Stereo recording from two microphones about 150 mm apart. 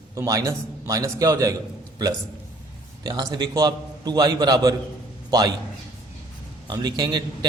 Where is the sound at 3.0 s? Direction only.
25° right (ahead or behind).